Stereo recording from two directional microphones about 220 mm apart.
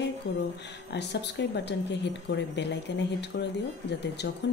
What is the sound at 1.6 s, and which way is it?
Speech, 50° left (ahead or behind).